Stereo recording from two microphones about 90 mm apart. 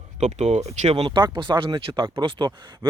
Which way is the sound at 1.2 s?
55° right (ahead or behind).